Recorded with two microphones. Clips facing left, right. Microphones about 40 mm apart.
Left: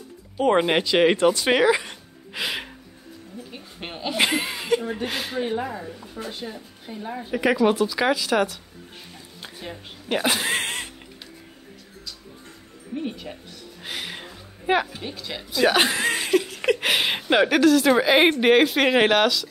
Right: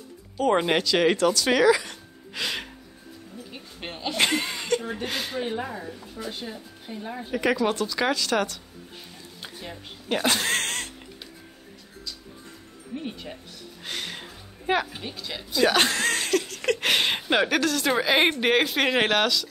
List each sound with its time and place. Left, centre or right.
0.4 s speech: centre
2.3 s a sound: centre
3.5 s speech: centre
12.9 s speech: centre
13.8 s a sound: centre
15.0 s speech: centre